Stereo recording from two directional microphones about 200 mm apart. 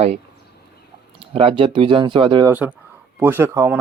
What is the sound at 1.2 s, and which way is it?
Speech, 25° right (ahead or behind).